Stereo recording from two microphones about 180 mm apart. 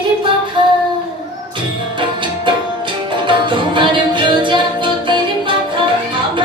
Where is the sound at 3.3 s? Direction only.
25° right (ahead or behind).